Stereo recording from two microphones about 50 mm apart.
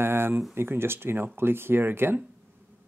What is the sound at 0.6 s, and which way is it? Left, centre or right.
Speech, right.